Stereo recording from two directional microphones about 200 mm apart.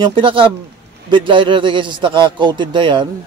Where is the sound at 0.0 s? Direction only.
25° right (ahead or behind).